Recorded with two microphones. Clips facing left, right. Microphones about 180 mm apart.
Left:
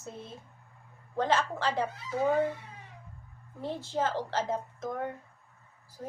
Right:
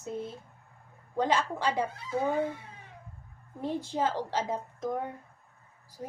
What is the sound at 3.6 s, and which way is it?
Speech, 15° right (ahead or behind).